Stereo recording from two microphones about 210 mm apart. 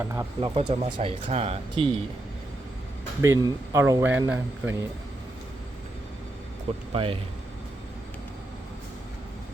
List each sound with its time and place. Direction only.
0.0 s speech: 10° right (ahead or behind)
0.5 s speech: 25° right (ahead or behind)
3.2 s speech: 15° right (ahead or behind)
6.9 s speech: 25° right (ahead or behind)